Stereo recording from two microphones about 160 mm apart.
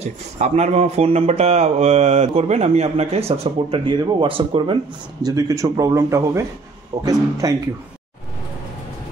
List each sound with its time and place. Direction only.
0.0 s speech: 45° right (ahead or behind)
5.2 s speech: 20° right (ahead or behind)